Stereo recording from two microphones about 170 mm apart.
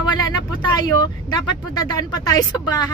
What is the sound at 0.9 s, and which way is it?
Speech, 25° left (ahead or behind).